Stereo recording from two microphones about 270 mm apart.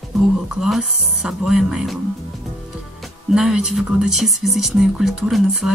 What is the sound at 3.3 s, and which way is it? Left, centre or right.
Speech, centre.